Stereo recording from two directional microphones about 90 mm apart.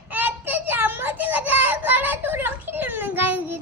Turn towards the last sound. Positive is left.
turn(degrees=-20)  # may be behind; listen again after turning